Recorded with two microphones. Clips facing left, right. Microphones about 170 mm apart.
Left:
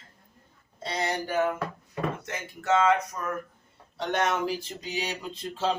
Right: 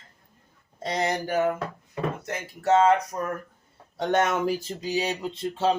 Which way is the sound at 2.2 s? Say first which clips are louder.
Right 6 dB; 35° right (ahead or behind).